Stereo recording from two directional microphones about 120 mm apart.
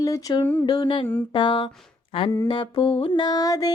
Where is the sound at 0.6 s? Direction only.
40° left (ahead or behind).